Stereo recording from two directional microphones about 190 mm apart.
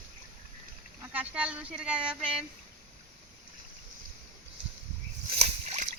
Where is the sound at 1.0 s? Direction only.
10° right (ahead or behind).